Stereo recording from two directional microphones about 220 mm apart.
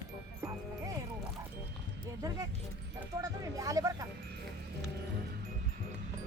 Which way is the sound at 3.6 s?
15° right (ahead or behind).